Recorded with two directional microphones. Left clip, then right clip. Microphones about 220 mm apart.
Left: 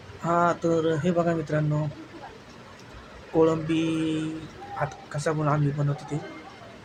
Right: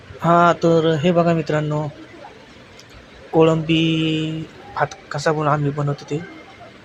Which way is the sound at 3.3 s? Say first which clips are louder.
Right 7 dB; 15° right (ahead or behind).